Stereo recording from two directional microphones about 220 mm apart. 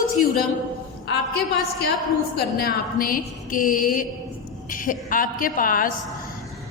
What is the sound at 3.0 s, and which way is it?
A woman's voice, 40° left (ahead or behind).